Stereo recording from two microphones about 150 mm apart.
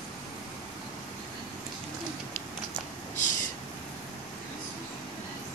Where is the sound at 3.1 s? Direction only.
55° left (ahead or behind).